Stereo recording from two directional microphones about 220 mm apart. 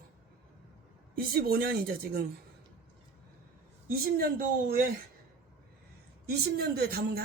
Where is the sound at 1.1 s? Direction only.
45° right (ahead or behind).